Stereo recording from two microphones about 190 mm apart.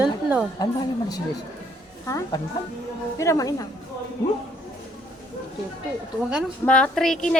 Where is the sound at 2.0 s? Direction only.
15° left (ahead or behind).